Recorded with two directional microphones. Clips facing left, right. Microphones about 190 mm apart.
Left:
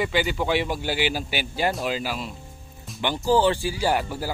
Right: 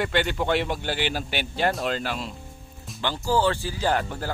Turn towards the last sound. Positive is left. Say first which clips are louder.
# left 1 dB
turn(degrees=5)  # may be behind; listen again after turning